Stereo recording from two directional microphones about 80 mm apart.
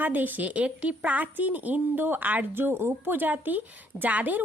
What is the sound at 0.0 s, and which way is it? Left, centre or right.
A woman's voice, right.